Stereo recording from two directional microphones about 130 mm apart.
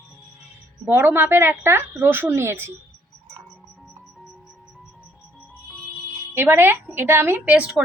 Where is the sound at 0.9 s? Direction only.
15° right (ahead or behind).